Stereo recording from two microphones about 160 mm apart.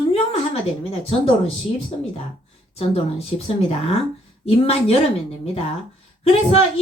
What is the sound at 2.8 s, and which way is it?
A woman's voice, 40° left (ahead or behind).